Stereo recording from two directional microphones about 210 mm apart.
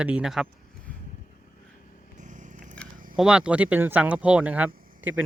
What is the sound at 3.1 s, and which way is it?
Speech, 5° right (ahead or behind).